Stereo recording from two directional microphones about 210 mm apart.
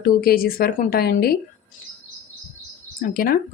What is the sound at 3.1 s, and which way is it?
Speech, 45° left (ahead or behind).